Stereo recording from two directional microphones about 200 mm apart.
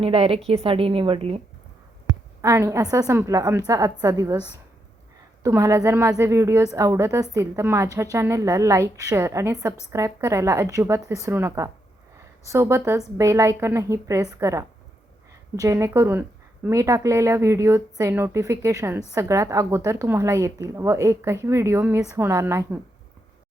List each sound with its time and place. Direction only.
0.0 s a woman's voice: 30° right (ahead or behind)
2.4 s a woman's voice: 15° right (ahead or behind)